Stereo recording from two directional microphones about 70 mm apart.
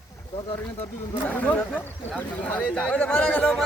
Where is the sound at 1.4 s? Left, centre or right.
Left.